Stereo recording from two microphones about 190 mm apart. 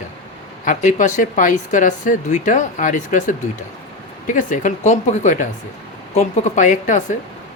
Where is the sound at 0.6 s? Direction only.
40° left (ahead or behind).